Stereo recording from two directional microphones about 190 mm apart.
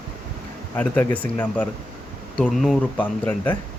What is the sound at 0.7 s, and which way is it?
Speech, 10° left (ahead or behind).